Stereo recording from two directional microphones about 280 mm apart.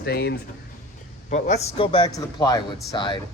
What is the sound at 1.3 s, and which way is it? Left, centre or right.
A man's voice, left.